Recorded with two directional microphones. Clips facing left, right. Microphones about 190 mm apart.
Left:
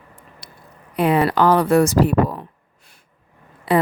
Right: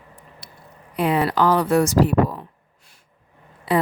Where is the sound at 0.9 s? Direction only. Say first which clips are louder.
Left 3 dB; 60° left (ahead or behind).